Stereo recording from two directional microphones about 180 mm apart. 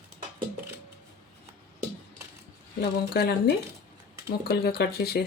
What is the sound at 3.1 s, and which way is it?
Speech, 60° left (ahead or behind).